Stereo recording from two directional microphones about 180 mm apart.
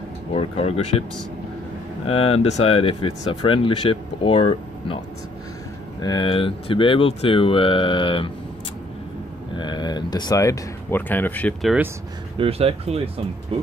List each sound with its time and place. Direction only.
0.3 s speech: 35° left (ahead or behind)
2.0 s speech: 35° left (ahead or behind)
9.6 s speech: 25° left (ahead or behind); by 11.7 s 10° left (ahead or behind)
12.4 s speech: 35° right (ahead or behind)